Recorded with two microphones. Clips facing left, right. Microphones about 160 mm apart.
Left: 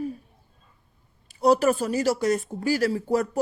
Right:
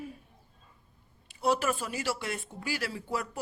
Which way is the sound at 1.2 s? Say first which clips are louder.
Left 9 dB; 40° left (ahead or behind).